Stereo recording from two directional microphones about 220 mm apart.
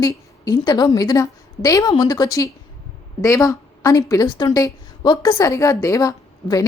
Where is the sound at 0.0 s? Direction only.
15° left (ahead or behind).